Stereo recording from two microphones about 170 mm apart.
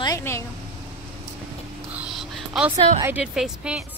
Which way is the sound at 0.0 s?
20° left (ahead or behind).